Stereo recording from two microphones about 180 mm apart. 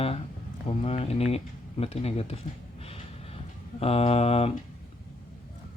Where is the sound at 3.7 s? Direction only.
35° left (ahead or behind).